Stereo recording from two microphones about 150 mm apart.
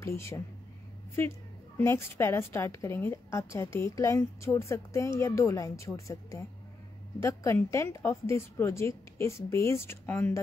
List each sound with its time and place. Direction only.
0.0 s a woman's voice: 20° left (ahead or behind)
1.8 s a woman's voice: 15° left (ahead or behind)